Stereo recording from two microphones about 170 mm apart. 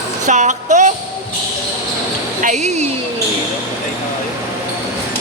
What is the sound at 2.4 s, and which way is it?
Speech, 40° right (ahead or behind).